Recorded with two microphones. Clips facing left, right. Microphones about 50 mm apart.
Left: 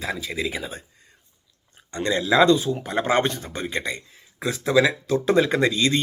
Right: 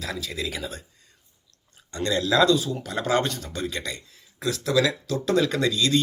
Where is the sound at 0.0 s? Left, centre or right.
Left.